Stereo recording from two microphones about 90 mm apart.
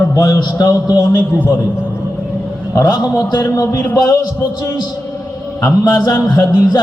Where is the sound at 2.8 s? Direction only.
45° left (ahead or behind).